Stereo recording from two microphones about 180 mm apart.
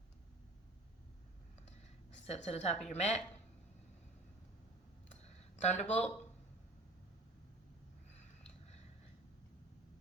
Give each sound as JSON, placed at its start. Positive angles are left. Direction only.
{"t": 2.2, "sound": "a woman's voice", "side_deg": 35}
{"t": 5.2, "sound": "a sound", "side_deg": 40}
{"t": 5.8, "sound": "speech", "side_deg": 10}